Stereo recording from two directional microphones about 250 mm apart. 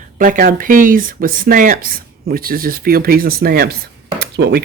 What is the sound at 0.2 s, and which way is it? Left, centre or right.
Speech, right.